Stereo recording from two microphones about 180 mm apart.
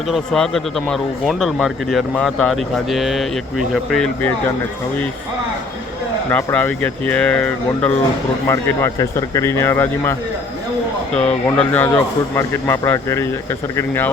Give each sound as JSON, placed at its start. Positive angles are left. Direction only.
{"t": 0.1, "sound": "speech", "side_deg": 5}
{"t": 6.3, "sound": "speech", "side_deg": 10}